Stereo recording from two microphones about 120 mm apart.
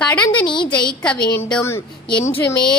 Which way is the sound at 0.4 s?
40° left (ahead or behind).